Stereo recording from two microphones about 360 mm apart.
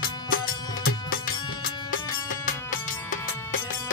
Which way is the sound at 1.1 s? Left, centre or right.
Left.